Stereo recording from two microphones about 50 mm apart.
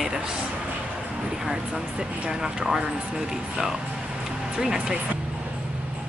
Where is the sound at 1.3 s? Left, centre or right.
Centre.